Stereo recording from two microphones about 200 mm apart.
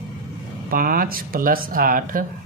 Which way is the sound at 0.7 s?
45° right (ahead or behind).